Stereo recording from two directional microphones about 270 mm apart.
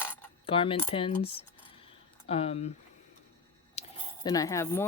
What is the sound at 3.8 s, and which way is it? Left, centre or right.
Cutlery, centre.